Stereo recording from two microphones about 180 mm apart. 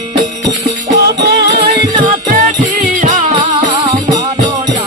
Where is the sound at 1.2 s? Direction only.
65° right (ahead or behind).